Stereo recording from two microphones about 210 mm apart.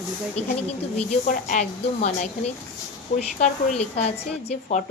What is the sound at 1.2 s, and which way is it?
A woman's voice, 35° left (ahead or behind).